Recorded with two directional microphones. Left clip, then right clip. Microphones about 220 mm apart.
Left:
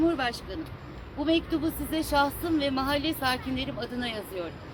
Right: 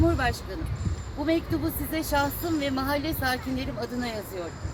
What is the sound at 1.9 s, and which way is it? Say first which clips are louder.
A woman's voice: left 1 dB; 25° left (ahead or behind).